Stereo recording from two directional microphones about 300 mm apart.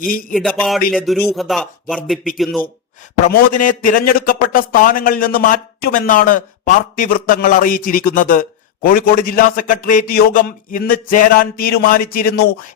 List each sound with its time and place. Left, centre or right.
0.0 s a man's voice: left
0.3 s speech: centre
3.3 s a man's voice: left